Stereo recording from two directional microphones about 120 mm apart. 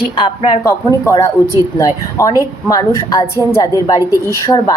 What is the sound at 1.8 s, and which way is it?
A woman's voice, 30° left (ahead or behind).